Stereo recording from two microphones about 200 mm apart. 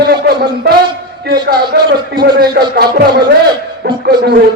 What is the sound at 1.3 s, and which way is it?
A man's voice, 50° right (ahead or behind).